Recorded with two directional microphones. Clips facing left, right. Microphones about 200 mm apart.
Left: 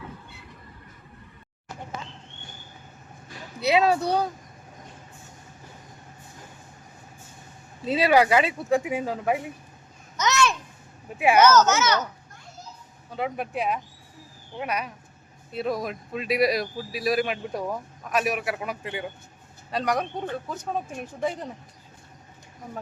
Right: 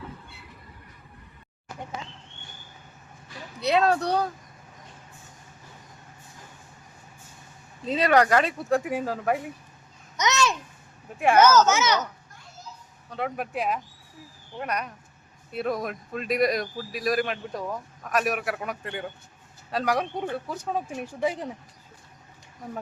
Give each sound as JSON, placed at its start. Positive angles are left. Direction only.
{"t": 3.6, "sound": "speech", "side_deg": 5}
{"t": 7.9, "sound": "speech", "side_deg": 5}
{"t": 10.2, "sound": "babbling", "side_deg": -20}
{"t": 11.2, "sound": "speech", "side_deg": 5}
{"t": 11.4, "sound": "speech", "side_deg": -10}
{"t": 13.1, "sound": "speech", "side_deg": 0}
{"t": 18.1, "sound": "speech", "side_deg": 0}
{"t": 19.7, "sound": "speech", "side_deg": -5}